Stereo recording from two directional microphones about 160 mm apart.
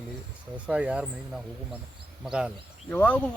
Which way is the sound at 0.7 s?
5° right (ahead or behind).